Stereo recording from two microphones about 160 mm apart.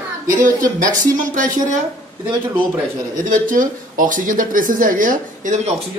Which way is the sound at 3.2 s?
55° right (ahead or behind).